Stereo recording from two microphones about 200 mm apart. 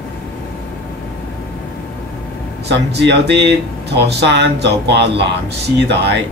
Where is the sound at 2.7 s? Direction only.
55° right (ahead or behind).